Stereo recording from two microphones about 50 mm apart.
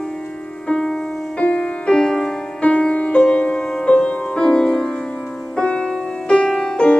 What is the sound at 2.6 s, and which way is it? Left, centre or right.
Music, left.